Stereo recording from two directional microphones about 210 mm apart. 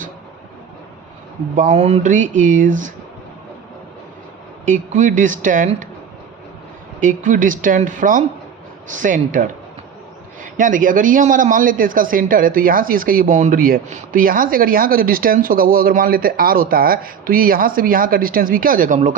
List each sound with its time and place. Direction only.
1.5 s a man's voice: 30° right (ahead or behind)
4.6 s a man's voice: 40° right (ahead or behind)
7.0 s a man's voice: 40° right (ahead or behind)
10.4 s a man's voice: 40° right (ahead or behind)